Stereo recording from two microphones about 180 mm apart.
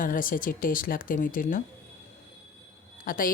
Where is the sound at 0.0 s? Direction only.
50° left (ahead or behind).